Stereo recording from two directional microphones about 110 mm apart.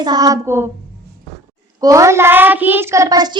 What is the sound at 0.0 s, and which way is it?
Child singing, 35° right (ahead or behind).